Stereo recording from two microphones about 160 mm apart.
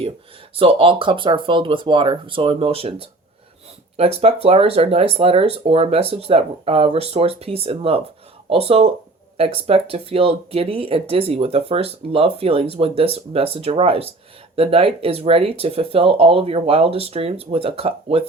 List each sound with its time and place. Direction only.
0.5 s speech: 35° right (ahead or behind)
3.9 s speech: 40° right (ahead or behind)